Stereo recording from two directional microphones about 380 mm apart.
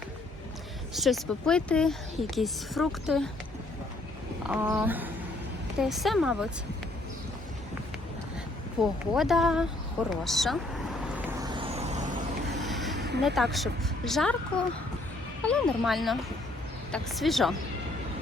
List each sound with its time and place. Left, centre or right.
0.9 s speech: centre
4.4 s speech: centre
8.8 s speech: centre
11.0 s vehicle: centre
12.5 s a sound: centre
13.0 s a sound: right
13.2 s speech: centre